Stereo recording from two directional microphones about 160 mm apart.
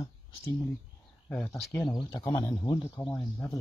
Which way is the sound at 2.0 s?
25° left (ahead or behind).